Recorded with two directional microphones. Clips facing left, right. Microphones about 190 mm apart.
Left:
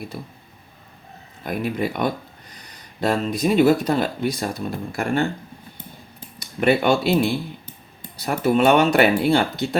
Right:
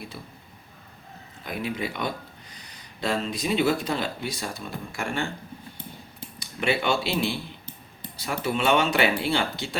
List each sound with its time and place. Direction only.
1.5 s speech: 50° left (ahead or behind)
6.6 s speech: 50° left (ahead or behind)